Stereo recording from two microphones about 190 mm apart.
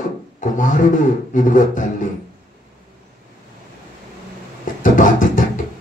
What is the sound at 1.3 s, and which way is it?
Speech, 45° left (ahead or behind).